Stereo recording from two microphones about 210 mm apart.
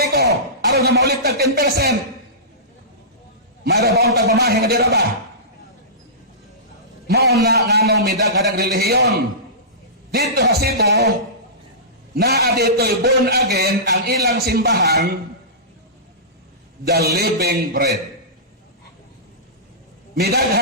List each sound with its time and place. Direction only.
0.0 s speech: 50° right (ahead or behind)
3.6 s a man's voice: 50° right (ahead or behind)
7.1 s a man's voice: 50° right (ahead or behind)
12.1 s a man's voice: 50° right (ahead or behind)
16.8 s a man's voice: 50° right (ahead or behind)
20.1 s a man's voice: 50° right (ahead or behind)